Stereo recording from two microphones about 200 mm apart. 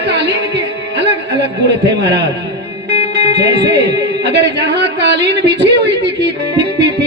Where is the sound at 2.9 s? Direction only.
30° left (ahead or behind).